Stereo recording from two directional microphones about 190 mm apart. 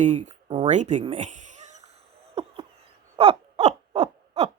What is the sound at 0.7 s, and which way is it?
Speech, 40° right (ahead or behind).